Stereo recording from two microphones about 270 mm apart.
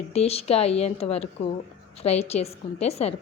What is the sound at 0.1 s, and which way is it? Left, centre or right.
A woman's voice, left.